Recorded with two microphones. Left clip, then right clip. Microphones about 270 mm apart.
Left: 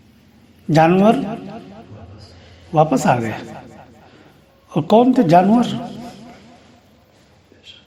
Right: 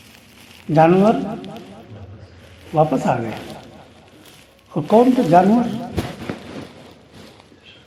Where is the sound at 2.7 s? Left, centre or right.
Left.